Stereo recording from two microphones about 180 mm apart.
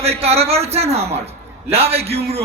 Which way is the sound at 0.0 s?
35° right (ahead or behind).